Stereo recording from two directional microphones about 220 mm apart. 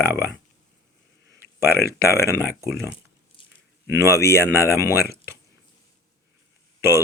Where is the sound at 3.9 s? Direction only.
15° right (ahead or behind).